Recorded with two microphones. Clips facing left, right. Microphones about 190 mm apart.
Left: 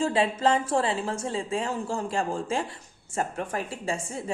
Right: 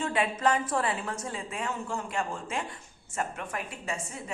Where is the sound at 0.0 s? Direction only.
30° left (ahead or behind).